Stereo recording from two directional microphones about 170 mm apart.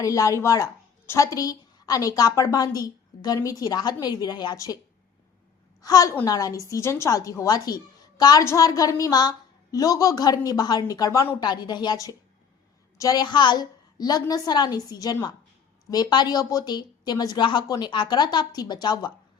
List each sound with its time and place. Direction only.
0.0 s a woman's voice: 20° left (ahead or behind)
5.8 s a woman's voice: 20° left (ahead or behind)